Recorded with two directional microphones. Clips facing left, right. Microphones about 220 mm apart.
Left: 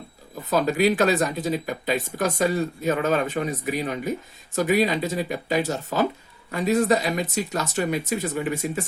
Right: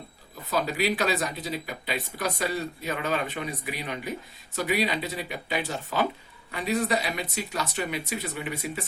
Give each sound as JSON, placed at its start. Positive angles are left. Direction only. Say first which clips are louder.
{"t": 0.5, "sound": "speech", "louder": "left 6 dB", "side_deg": 45}